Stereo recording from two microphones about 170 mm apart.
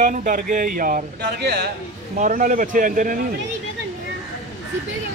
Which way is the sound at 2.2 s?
50° right (ahead or behind).